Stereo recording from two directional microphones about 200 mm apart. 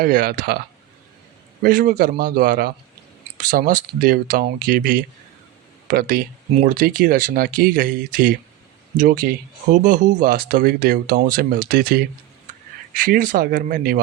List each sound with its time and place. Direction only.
0.0 s speech: 45° right (ahead or behind)
1.6 s speech: 45° right (ahead or behind)